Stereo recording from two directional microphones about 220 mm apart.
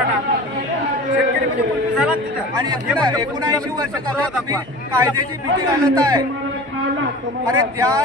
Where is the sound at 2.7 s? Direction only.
20° right (ahead or behind).